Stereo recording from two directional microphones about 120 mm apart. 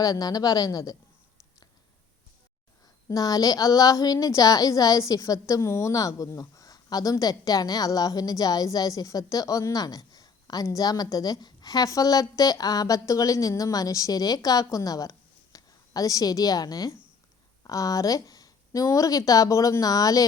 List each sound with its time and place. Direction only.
0.0 s a woman's voice: 30° left (ahead or behind)
3.1 s a woman's voice: 30° left (ahead or behind)